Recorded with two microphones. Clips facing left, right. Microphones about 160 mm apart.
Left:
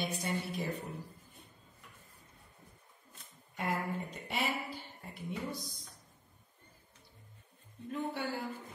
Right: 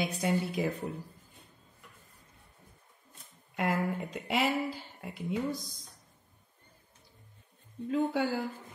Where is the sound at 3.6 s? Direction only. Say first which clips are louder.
Right 5 dB; 90° right.